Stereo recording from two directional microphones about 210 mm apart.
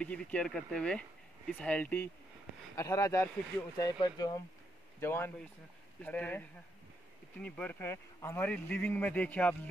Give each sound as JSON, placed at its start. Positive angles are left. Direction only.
{"t": 0.0, "sound": "speech", "side_deg": 5}